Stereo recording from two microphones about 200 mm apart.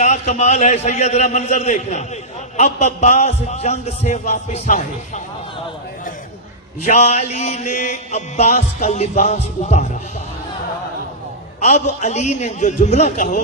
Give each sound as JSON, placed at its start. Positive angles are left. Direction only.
{"t": 0.0, "sound": "mantra", "side_deg": 35}
{"t": 6.8, "sound": "mantra", "side_deg": 35}
{"t": 11.6, "sound": "mantra", "side_deg": 35}